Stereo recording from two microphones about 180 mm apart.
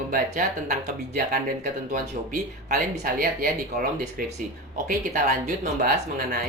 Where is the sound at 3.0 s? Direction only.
55° right (ahead or behind).